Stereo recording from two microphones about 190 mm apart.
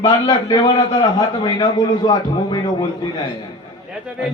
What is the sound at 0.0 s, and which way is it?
A man's voice, 20° left (ahead or behind).